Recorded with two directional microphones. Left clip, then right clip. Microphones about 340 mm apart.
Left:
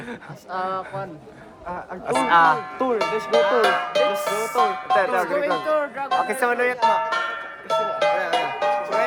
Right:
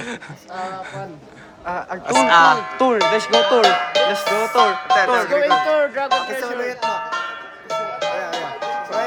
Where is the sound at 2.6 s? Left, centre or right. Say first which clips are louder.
Right 6 dB; right.